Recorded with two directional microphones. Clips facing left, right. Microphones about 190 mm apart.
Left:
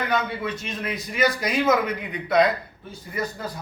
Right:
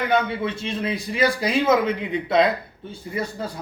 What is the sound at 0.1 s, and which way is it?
Speech, 25° right (ahead or behind).